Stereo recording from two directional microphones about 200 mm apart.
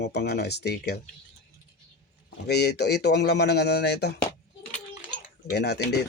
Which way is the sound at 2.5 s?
55° left (ahead or behind).